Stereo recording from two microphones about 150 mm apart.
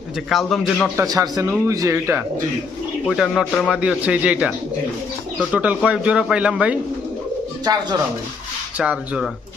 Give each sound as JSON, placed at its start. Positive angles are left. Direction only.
{"t": 0.3, "sound": "speech", "side_deg": 0}
{"t": 0.9, "sound": "speech", "side_deg": -25}
{"t": 3.1, "sound": "speech", "side_deg": 0}
{"t": 7.6, "sound": "speech", "side_deg": -25}
{"t": 8.8, "sound": "speech", "side_deg": -5}